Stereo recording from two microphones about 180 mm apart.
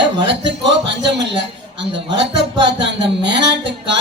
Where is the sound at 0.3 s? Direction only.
75° right (ahead or behind).